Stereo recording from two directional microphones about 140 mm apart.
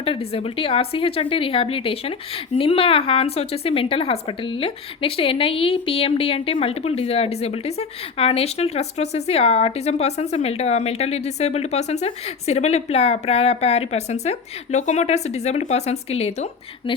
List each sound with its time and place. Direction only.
0.0 s a woman's voice: 45° left (ahead or behind)